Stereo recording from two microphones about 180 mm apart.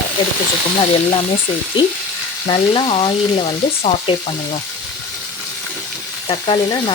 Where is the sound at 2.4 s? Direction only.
30° left (ahead or behind).